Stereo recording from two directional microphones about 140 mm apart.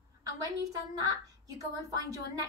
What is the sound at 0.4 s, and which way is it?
A woman's voice, 25° right (ahead or behind).